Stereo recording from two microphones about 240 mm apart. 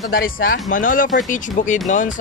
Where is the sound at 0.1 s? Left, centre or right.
Left.